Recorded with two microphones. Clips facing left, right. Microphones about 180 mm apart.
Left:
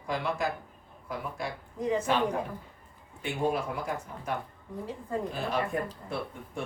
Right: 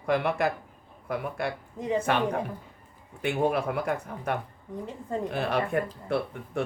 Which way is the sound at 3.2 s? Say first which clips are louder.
Right 4 dB; 65° right (ahead or behind).